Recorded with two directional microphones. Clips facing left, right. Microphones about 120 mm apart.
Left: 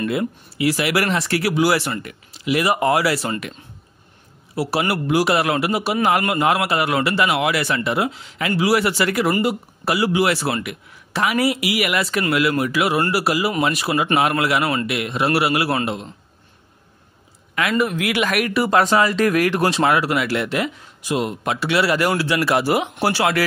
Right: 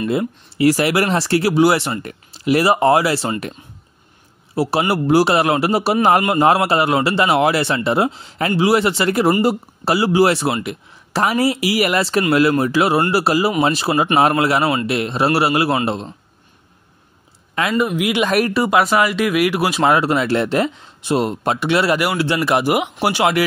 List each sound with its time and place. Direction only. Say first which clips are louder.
0.0 s speech: right 2 dB; 25° right (ahead or behind)
0.6 s speech: right 5 dB; 40° right (ahead or behind); by 2.0 s 25° right (ahead or behind)
2.0 s speech: right 5 dB; 40° right (ahead or behind)
4.6 s speech: right 4 dB; 25° right (ahead or behind)
8.6 s speech: right 2 dB; 25° right (ahead or behind)
17.6 s speech: right 2 dB; 20° right (ahead or behind)
18.7 s speech: right 1 dB; 10° right (ahead or behind)
19.8 s speech: right 6 dB; 25° right (ahead or behind)